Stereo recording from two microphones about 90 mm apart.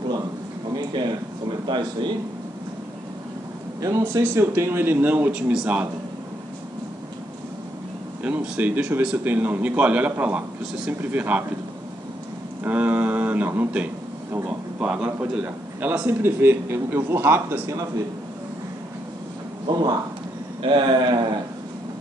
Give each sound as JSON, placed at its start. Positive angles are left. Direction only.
{"t": 1.7, "sound": "speech", "side_deg": -60}
{"t": 4.0, "sound": "a man's voice", "side_deg": -25}
{"t": 8.2, "sound": "a man's voice", "side_deg": -15}
{"t": 12.6, "sound": "a man's voice", "side_deg": -20}
{"t": 19.7, "sound": "speech", "side_deg": -55}